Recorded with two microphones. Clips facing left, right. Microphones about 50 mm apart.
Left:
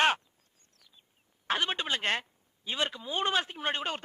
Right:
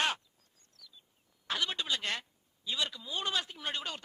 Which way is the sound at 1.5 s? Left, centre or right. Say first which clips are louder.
Left 4 dB; left.